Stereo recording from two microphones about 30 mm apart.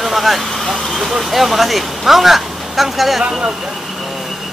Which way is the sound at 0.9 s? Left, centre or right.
Centre.